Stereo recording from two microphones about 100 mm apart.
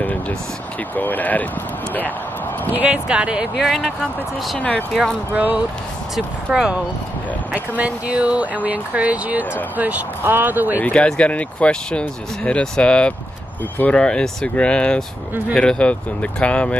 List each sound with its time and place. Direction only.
0.0 s vehicle: 15° left (ahead or behind)
0.9 s speech: 15° left (ahead or behind)
2.7 s speech: 15° right (ahead or behind)
4.6 s speech: 10° left (ahead or behind)
5.3 s speech: 15° right (ahead or behind)
10.8 s speech: 10° left (ahead or behind)